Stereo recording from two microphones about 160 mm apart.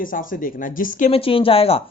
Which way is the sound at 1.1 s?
35° left (ahead or behind).